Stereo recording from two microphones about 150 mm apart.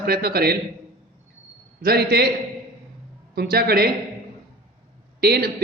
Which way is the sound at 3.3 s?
90° right.